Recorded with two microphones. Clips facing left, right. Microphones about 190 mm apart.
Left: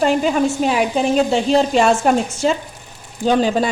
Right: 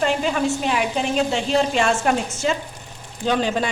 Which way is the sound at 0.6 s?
40° left (ahead or behind).